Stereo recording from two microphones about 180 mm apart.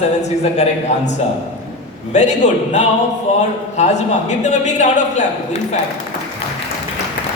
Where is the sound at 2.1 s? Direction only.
40° left (ahead or behind).